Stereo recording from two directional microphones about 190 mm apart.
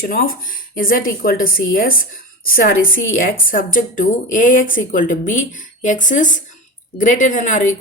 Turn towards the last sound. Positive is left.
turn(degrees=40)  # may be behind; listen again after turning